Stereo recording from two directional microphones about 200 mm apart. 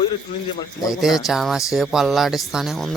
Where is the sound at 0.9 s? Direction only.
Centre (ahead or behind).